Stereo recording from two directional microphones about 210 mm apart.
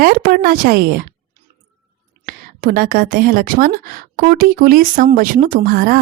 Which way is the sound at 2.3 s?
45° right (ahead or behind).